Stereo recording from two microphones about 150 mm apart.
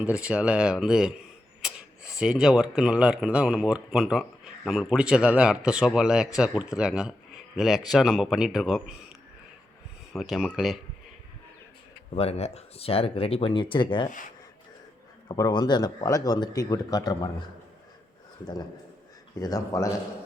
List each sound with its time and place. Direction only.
0.0 s speech: 5° right (ahead or behind)
10.1 s speech: centre (ahead or behind)
12.1 s speech: 40° left (ahead or behind)
15.3 s speech: 30° left (ahead or behind)
19.4 s speech: 25° left (ahead or behind)